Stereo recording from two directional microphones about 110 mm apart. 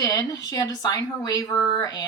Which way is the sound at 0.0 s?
35° left (ahead or behind).